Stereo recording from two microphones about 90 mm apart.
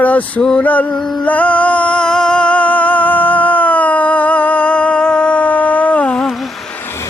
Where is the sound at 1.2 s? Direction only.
15° left (ahead or behind).